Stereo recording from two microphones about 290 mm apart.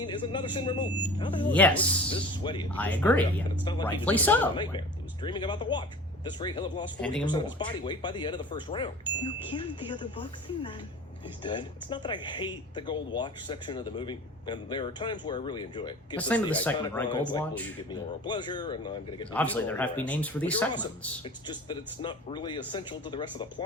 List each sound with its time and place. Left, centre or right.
0.0 s speech: centre
1.5 s speech: centre
2.0 s speech: centre
2.7 s speech: centre
16.1 s speech: centre
17.2 s speech: centre
17.4 s speech: centre
19.3 s speech: centre